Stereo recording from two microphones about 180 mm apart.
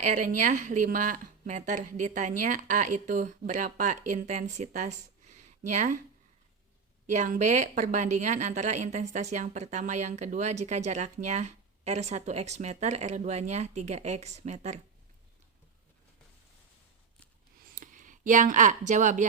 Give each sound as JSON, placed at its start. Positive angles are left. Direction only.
{"t": 0.0, "sound": "speech", "side_deg": -45}
{"t": 7.1, "sound": "a woman's voice", "side_deg": -40}
{"t": 17.7, "sound": "a sound", "side_deg": -45}